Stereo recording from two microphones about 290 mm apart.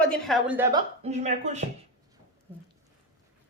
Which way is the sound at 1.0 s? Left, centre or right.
Right.